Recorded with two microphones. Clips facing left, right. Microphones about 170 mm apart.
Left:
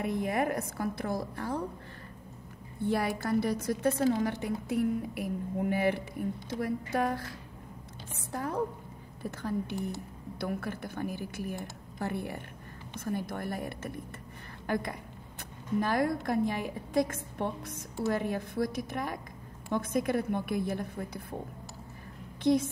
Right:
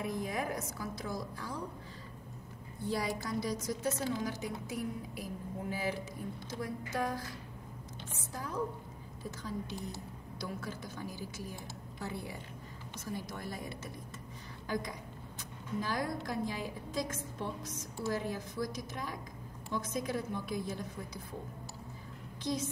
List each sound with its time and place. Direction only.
0.0 s a woman's voice: 60° left (ahead or behind)
2.8 s a woman's voice: 60° left (ahead or behind)
8.3 s a woman's voice: 60° left (ahead or behind)
22.4 s a woman's voice: 60° left (ahead or behind)